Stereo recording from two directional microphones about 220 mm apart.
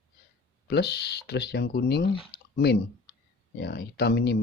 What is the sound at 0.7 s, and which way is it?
Speech, 50° left (ahead or behind).